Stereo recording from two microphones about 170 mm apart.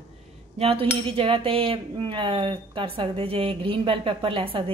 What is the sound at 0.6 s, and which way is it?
Speech, 35° right (ahead or behind).